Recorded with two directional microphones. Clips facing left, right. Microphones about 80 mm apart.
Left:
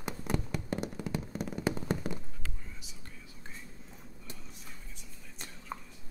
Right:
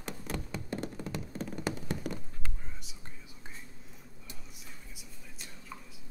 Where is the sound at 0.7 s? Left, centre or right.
Centre.